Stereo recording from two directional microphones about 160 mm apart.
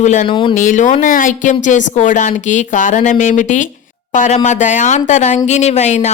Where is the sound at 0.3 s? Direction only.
30° left (ahead or behind).